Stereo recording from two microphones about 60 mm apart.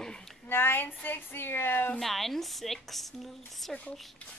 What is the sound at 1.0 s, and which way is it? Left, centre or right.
Speech, left.